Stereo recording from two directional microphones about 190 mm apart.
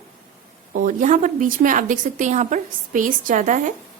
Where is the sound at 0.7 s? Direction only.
45° right (ahead or behind).